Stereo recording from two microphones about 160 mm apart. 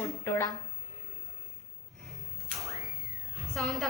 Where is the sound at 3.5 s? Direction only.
Centre (ahead or behind).